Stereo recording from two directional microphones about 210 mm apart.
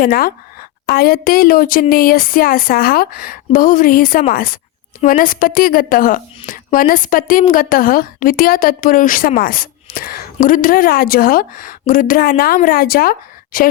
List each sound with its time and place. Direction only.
0.0 s a woman's voice: 45° left (ahead or behind)